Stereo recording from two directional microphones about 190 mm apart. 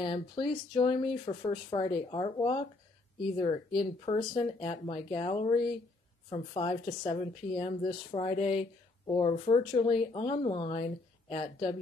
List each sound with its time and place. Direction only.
0.0 s a woman's voice: 25° left (ahead or behind)